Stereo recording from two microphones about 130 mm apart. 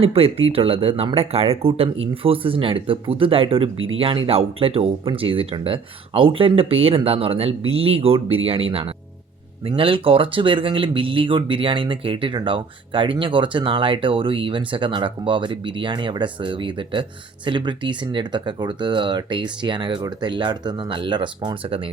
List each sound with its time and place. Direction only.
0.0 s speech: 45° right (ahead or behind)